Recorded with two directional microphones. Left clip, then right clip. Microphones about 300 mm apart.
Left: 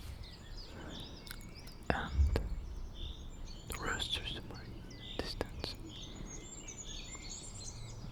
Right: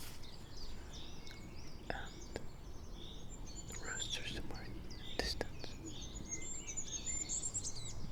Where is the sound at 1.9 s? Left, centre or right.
Left.